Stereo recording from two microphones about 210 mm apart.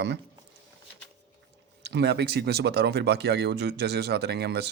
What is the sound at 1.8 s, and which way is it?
Speech, 50° right (ahead or behind).